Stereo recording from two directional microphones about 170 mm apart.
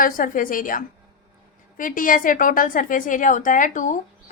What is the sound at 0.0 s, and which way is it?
A woman's voice, 55° left (ahead or behind).